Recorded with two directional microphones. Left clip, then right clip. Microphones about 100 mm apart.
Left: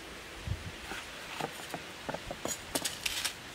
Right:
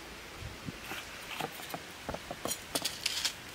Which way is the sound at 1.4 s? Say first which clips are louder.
Left 2 dB; centre (ahead or behind).